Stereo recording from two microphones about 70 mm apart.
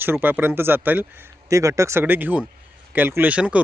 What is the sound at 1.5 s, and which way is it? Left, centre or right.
Speech, right.